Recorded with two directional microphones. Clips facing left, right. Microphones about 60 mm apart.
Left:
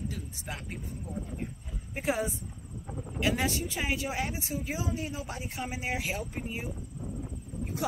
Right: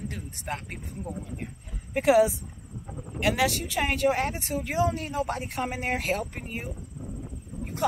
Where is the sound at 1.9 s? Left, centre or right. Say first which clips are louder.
Right 11 dB; right.